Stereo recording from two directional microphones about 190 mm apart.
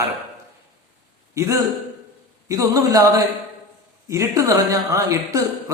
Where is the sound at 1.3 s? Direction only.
15° right (ahead or behind).